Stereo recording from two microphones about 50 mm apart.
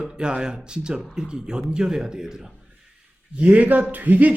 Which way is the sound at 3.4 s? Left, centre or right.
Right.